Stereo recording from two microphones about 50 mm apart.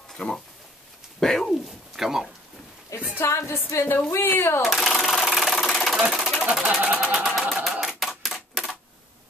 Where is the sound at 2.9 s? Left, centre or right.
Left.